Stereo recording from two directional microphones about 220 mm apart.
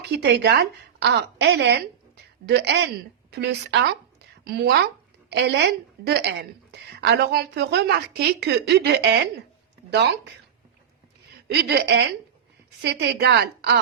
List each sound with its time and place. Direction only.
0.2 s a woman's voice: 50° right (ahead or behind)
11.5 s a woman's voice: 50° right (ahead or behind)